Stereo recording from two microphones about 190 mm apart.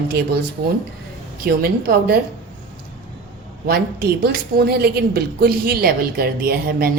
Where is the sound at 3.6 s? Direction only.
50° right (ahead or behind).